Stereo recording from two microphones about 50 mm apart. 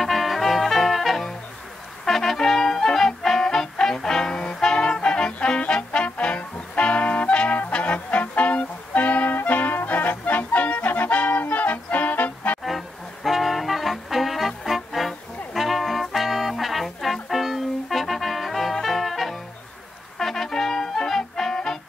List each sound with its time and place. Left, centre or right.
0.0 s music: centre
2.0 s trumpet: centre; by 11.4 s left
11.5 s music: left
12.6 s brass instrument: centre
20.2 s music: centre